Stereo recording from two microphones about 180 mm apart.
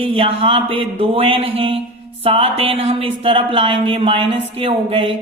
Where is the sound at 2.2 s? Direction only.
35° right (ahead or behind).